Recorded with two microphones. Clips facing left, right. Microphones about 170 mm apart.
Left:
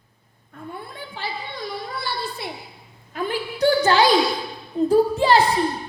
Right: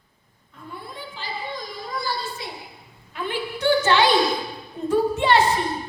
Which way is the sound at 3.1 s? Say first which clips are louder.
Left 2 dB; 40° left (ahead or behind).